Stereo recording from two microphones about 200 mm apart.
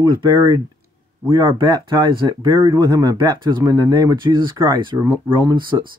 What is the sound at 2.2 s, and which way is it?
Speech, 15° right (ahead or behind).